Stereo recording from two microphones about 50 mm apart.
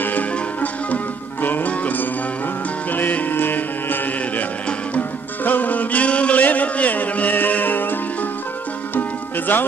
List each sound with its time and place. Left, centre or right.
0.0 s music: left
9.5 s speech: left